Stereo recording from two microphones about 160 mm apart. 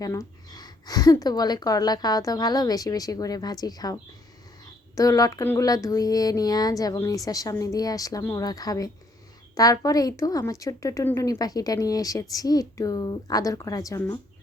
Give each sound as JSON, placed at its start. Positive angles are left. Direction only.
{"t": 0.0, "sound": "speech", "side_deg": 20}